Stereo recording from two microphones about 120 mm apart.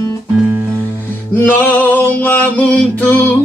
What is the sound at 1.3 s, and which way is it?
Speech, 15° left (ahead or behind).